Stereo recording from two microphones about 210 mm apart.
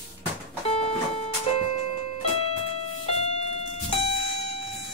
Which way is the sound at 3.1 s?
30° left (ahead or behind).